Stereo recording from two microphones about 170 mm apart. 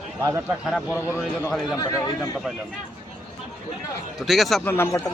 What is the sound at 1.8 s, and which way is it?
Speech, 20° left (ahead or behind).